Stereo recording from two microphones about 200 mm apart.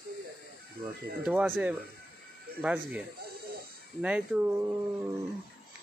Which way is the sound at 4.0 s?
5° right (ahead or behind).